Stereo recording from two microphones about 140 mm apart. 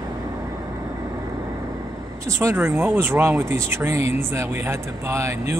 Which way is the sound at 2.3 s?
20° right (ahead or behind).